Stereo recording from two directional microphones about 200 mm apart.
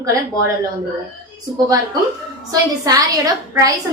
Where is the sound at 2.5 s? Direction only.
15° right (ahead or behind).